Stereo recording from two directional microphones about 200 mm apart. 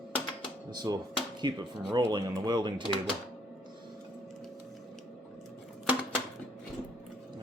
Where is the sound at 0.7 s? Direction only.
20° right (ahead or behind).